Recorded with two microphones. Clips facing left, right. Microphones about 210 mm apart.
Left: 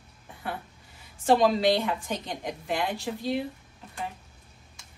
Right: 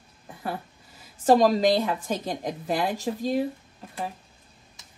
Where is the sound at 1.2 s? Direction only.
40° right (ahead or behind).